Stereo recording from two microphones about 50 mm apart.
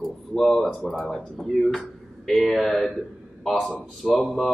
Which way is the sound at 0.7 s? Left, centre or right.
Centre.